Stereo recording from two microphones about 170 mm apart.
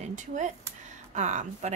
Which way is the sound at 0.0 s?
45° right (ahead or behind).